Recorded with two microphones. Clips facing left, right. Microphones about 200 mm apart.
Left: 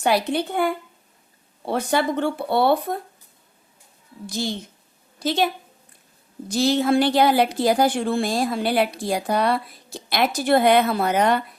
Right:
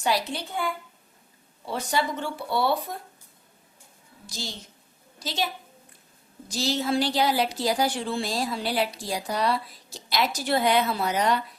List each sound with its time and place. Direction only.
0.0 s a woman's voice: 60° left (ahead or behind)
4.3 s a woman's voice: 55° left (ahead or behind)
6.5 s a woman's voice: 55° left (ahead or behind)